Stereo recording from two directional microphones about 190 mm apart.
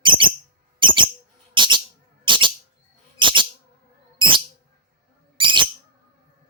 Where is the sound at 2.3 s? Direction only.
25° right (ahead or behind).